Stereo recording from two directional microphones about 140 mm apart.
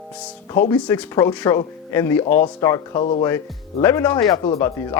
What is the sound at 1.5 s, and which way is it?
Speech, 25° left (ahead or behind).